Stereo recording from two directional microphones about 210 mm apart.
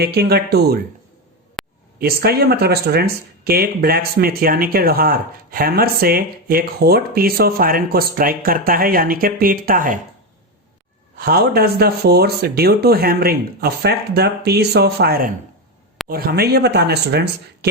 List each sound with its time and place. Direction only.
0.0 s speech: 50° right (ahead or behind)
1.6 s a sound: centre (ahead or behind)
2.0 s speech: 45° right (ahead or behind)
11.2 s speech: 45° right (ahead or behind)